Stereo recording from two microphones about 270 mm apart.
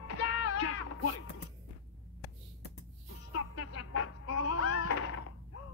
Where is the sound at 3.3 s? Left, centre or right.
Left.